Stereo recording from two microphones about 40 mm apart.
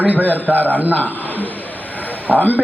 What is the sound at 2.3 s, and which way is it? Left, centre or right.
Speech, left.